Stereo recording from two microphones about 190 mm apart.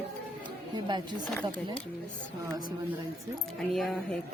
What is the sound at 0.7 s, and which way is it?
Speech, 25° right (ahead or behind).